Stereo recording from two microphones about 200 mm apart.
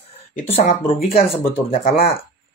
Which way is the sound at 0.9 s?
45° left (ahead or behind).